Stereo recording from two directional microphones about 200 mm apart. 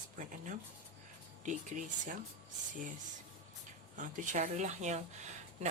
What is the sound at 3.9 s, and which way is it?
Speech, 40° right (ahead or behind).